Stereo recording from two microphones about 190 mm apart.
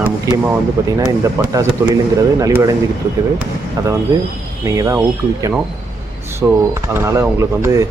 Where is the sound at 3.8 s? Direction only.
20° right (ahead or behind).